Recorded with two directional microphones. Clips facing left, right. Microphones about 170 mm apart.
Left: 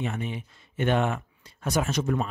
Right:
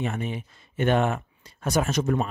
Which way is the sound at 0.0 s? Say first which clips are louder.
Right 2 dB; 45° right (ahead or behind).